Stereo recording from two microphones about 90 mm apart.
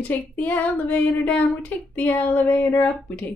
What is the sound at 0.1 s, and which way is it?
Speech, 20° left (ahead or behind).